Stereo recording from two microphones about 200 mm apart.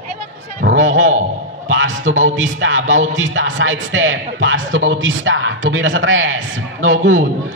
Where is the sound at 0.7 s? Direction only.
75° right (ahead or behind).